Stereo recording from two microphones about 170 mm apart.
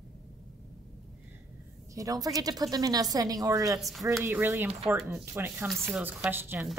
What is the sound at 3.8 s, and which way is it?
Speech, centre (ahead or behind).